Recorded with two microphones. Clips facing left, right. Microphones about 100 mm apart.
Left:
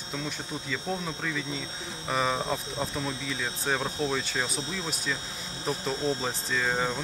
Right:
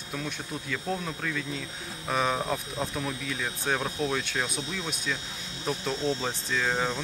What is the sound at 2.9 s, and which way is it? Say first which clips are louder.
Speech: even; 25° left (ahead or behind).